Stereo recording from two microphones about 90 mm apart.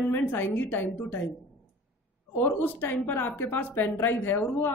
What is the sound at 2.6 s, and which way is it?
Speech, 20° left (ahead or behind).